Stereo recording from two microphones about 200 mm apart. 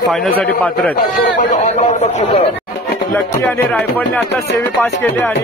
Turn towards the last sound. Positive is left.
turn(degrees=5)  # may be behind; listen again after turning